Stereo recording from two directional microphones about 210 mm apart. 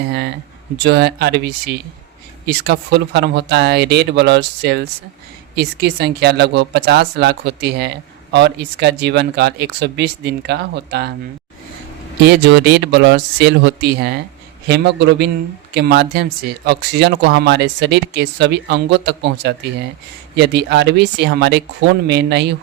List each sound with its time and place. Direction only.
0.1 s speech: 50° right (ahead or behind)
12.2 s speech: 55° right (ahead or behind)